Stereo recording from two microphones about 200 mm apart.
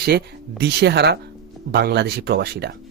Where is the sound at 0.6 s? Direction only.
55° right (ahead or behind).